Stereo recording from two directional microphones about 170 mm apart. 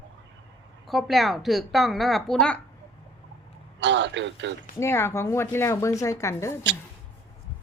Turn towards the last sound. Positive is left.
turn(degrees=15)  # may be behind; listen again after turning